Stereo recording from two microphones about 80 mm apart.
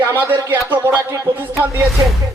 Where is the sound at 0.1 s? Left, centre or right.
Right.